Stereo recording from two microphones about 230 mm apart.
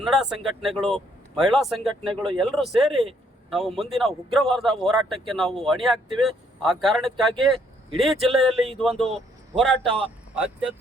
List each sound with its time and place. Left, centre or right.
0.0 s a man's voice: centre
2.0 s speech: right
2.4 s a man's voice: centre